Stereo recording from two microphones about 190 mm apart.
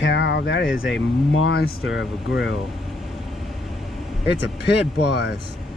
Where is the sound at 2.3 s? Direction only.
65° left (ahead or behind).